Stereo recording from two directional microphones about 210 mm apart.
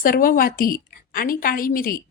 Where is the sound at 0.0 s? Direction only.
40° left (ahead or behind).